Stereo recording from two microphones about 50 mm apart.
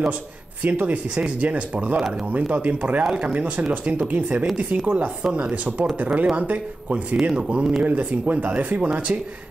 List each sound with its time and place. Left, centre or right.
0.7 s speech: right
4.1 s speech: right